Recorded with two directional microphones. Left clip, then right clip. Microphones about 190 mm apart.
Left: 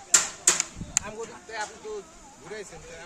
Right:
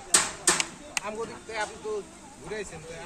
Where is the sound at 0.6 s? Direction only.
55° left (ahead or behind).